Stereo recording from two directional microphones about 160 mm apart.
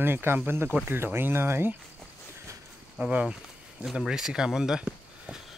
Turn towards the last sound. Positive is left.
turn(degrees=-5)  # may be behind; listen again after turning